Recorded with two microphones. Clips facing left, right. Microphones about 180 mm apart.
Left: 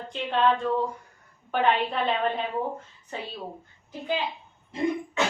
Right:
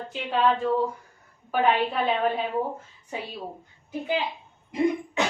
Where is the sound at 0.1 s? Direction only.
5° right (ahead or behind).